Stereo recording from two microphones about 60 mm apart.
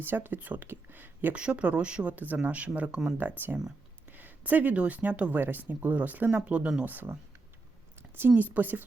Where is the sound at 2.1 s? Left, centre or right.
Right.